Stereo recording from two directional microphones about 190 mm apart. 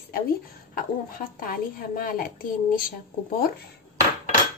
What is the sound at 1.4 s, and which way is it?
Speech, 50° left (ahead or behind).